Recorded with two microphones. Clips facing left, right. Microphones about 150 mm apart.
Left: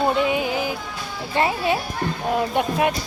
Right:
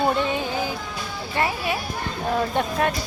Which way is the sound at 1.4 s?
25° left (ahead or behind).